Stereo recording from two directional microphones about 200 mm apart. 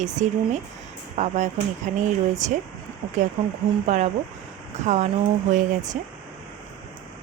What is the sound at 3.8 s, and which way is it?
Speech, 35° right (ahead or behind).